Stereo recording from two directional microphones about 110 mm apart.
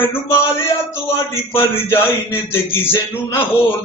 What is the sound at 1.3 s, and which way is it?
A man's voice, 20° left (ahead or behind).